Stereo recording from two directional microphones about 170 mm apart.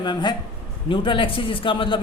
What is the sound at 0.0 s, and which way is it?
A man's voice, 25° left (ahead or behind).